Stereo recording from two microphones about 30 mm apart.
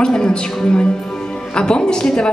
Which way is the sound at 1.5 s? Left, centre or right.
Left.